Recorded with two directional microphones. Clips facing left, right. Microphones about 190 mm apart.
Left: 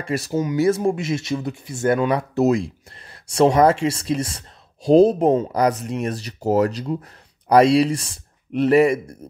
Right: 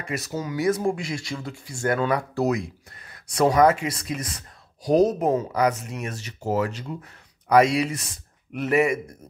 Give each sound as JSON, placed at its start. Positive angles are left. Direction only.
{"t": 0.0, "sound": "speech", "side_deg": 30}